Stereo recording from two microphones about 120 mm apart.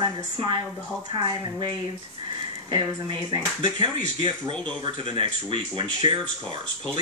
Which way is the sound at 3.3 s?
45° right (ahead or behind).